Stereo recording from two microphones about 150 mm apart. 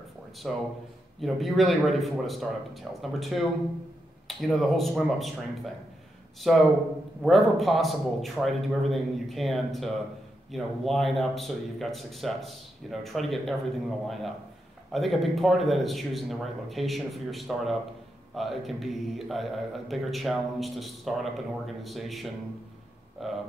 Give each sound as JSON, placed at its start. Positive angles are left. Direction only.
{"t": 0.4, "sound": "speech", "side_deg": 0}